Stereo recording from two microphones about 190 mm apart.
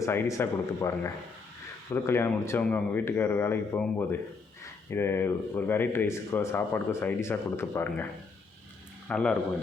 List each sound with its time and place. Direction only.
0.0 s speech: 15° left (ahead or behind)
9.0 s a man's voice: 5° left (ahead or behind)